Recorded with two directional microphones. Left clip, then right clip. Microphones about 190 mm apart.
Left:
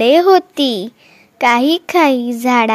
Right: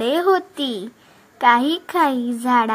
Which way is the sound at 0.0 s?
45° left (ahead or behind).